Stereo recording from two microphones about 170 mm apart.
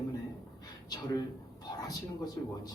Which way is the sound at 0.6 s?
25° left (ahead or behind).